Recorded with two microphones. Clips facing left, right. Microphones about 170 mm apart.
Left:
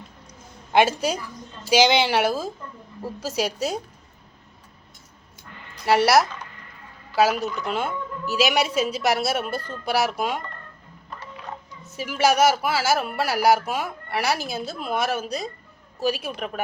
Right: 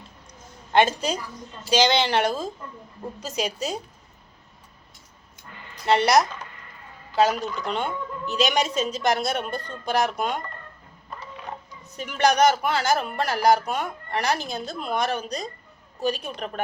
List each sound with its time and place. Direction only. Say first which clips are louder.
0.7 s speech: left 1 dB; 10° left (ahead or behind)
5.8 s speech: left 1 dB; 5° left (ahead or behind)
11.9 s speech: left 1 dB; 5° left (ahead or behind)